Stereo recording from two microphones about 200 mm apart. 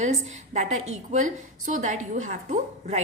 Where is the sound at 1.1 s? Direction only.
40° right (ahead or behind).